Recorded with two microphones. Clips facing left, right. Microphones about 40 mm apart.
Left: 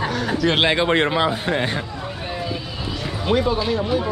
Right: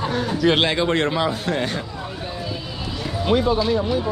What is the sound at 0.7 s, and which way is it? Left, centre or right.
Speech, left.